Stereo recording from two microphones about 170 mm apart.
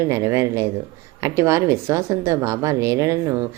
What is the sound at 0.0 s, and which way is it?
A woman's voice, 15° right (ahead or behind).